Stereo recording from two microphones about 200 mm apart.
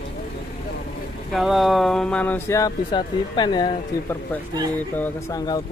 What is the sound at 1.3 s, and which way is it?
Speech, centre (ahead or behind).